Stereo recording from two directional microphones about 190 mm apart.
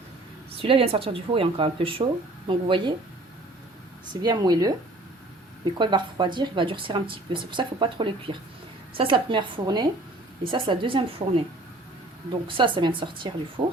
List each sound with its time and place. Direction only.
0.5 s speech: 30° right (ahead or behind)
4.1 s speech: 20° right (ahead or behind)
5.7 s speech: 25° right (ahead or behind)